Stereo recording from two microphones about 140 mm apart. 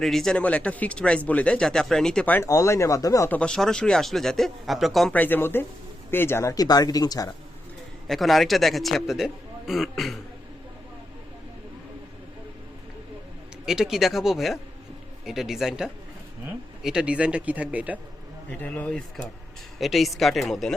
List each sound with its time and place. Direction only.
0.0 s speech: centre (ahead or behind)
2.5 s speech: 20° left (ahead or behind)
3.3 s a man's voice: 5° left (ahead or behind)
5.1 s speech: 15° left (ahead or behind); by 7.3 s 30° left (ahead or behind)
8.0 s a man's voice: centre (ahead or behind)
13.7 s a man's voice: 5° right (ahead or behind)
18.6 s a man's voice: 10° left (ahead or behind)